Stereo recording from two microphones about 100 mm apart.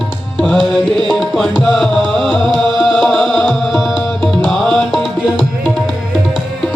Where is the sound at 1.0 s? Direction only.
Centre (ahead or behind).